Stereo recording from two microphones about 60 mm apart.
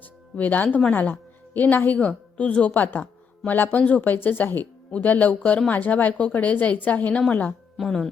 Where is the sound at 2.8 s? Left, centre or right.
Left.